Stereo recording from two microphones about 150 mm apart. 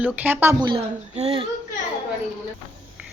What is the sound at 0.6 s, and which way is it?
Speech, 30° right (ahead or behind).